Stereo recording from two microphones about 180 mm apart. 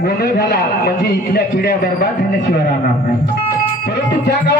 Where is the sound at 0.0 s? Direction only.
55° left (ahead or behind).